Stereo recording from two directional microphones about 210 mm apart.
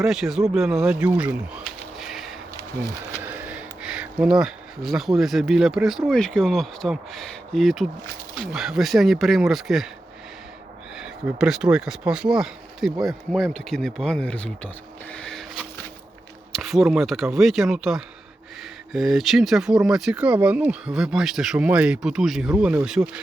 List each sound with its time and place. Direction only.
0.0 s speech: centre (ahead or behind)
10.9 s speech: 5° right (ahead or behind)
15.1 s a sound: 5° left (ahead or behind)
16.5 s speech: centre (ahead or behind)